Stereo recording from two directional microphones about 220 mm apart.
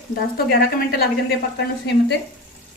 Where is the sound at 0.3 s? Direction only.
45° left (ahead or behind).